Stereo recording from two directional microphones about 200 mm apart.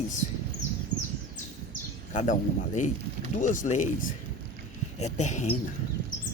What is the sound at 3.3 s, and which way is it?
Speech, 40° left (ahead or behind).